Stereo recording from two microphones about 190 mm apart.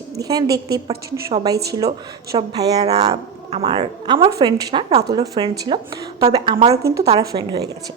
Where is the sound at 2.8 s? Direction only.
35° right (ahead or behind).